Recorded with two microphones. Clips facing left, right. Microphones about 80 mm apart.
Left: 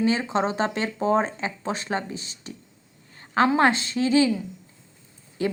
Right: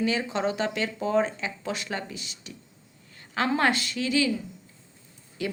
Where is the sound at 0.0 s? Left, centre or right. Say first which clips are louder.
Left 3 dB; left.